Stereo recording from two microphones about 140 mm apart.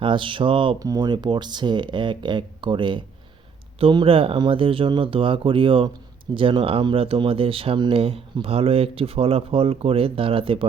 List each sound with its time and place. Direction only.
0.0 s speech: 35° right (ahead or behind)
0.8 s speech: 25° right (ahead or behind)